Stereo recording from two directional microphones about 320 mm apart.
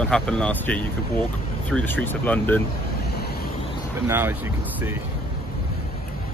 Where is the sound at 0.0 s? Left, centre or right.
Centre.